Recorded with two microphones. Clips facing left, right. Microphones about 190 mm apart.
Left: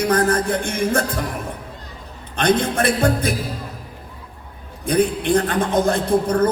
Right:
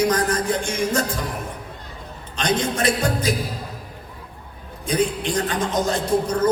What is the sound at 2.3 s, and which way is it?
Speech, 55° left (ahead or behind).